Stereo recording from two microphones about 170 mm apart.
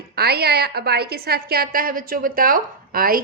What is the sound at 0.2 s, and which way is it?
A woman's voice, 70° right (ahead or behind).